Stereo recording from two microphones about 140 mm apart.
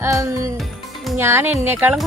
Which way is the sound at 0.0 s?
20° right (ahead or behind).